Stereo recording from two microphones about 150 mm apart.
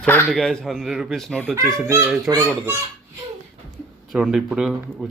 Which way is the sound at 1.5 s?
20° right (ahead or behind).